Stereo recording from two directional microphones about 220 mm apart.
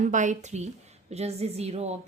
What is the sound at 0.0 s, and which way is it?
A woman's voice, 35° right (ahead or behind).